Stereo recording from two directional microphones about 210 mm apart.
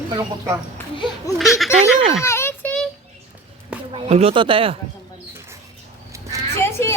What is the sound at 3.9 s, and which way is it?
Speech, 25° right (ahead or behind).